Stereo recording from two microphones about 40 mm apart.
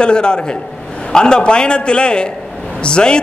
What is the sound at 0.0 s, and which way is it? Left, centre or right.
A man's voice, left.